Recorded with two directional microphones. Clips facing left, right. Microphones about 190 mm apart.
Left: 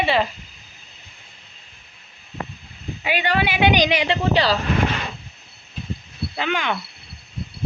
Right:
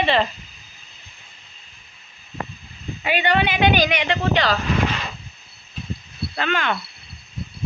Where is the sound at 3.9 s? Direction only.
30° left (ahead or behind).